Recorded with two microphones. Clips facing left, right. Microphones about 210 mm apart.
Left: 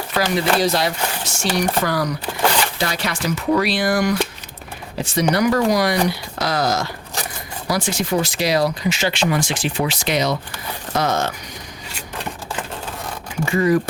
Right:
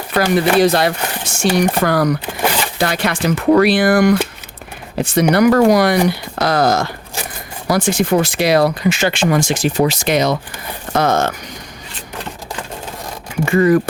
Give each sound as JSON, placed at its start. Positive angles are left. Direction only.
{"t": 0.1, "sound": "speech", "side_deg": -55}
{"t": 13.4, "sound": "speech", "side_deg": -55}